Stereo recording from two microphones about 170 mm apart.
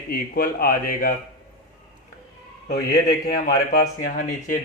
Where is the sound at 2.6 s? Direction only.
55° left (ahead or behind).